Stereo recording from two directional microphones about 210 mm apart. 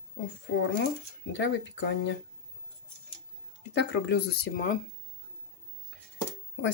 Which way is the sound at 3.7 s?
55° left (ahead or behind).